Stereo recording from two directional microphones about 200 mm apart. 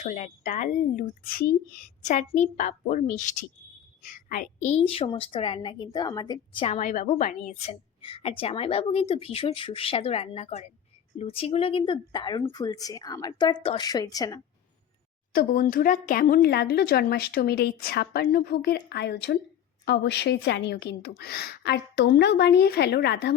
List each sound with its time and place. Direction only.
0.0 s a woman's voice: 40° left (ahead or behind); by 14.4 s 20° left (ahead or behind)
15.3 s a woman's voice: 50° left (ahead or behind)